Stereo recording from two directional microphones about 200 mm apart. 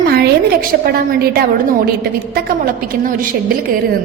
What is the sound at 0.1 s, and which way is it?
A woman's voice, 50° right (ahead or behind).